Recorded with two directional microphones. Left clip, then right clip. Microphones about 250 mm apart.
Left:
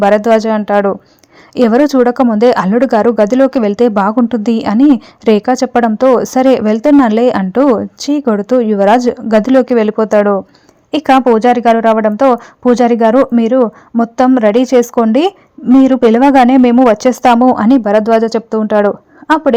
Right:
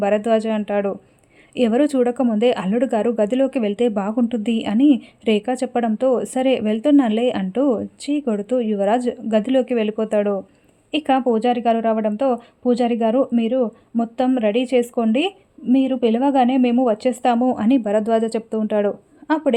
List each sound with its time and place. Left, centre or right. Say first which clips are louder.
0.0 s speech: left 9 dB; centre